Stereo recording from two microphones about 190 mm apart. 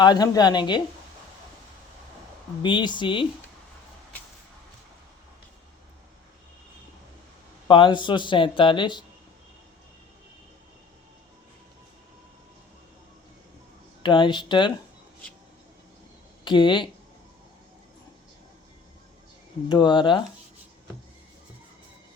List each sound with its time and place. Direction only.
0.0 s speech: 20° left (ahead or behind)
2.6 s speech: 25° left (ahead or behind)
7.7 s speech: 25° left (ahead or behind)
14.0 s speech: 25° left (ahead or behind)
16.4 s speech: 25° left (ahead or behind)
19.6 s speech: 25° left (ahead or behind)